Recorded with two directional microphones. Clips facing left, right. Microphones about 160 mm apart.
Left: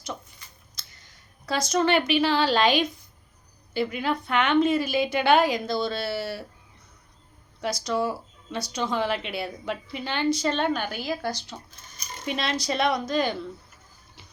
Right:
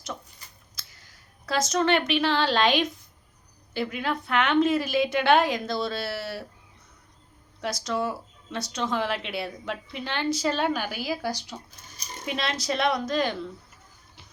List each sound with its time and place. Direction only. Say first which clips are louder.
0.9 s a woman's voice: even; 5° right (ahead or behind)
7.6 s speech: left 2 dB; centre (ahead or behind)
12.2 s speech: left 2 dB; centre (ahead or behind)